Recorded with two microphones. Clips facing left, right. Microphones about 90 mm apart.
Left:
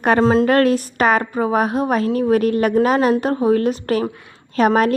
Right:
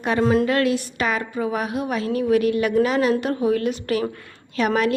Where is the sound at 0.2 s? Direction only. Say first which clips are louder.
Even; 35° left (ahead or behind).